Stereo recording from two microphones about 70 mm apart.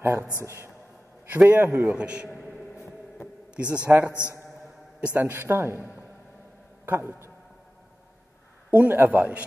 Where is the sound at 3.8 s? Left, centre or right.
Right.